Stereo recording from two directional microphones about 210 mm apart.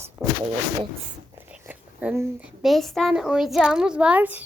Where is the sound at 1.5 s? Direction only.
5° right (ahead or behind).